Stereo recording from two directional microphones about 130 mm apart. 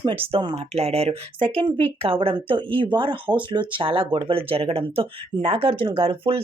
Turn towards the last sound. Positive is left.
turn(degrees=-45)  # may be behind; listen again after turning